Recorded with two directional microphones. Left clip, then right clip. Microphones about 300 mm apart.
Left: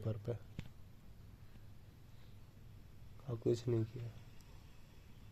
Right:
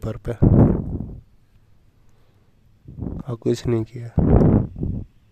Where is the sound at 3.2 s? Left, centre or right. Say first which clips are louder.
Right 14 dB; right.